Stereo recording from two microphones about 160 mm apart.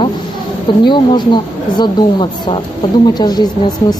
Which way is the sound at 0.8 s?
25° left (ahead or behind).